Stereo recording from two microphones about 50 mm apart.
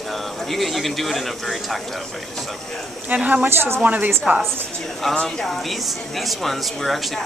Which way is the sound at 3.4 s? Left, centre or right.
Right.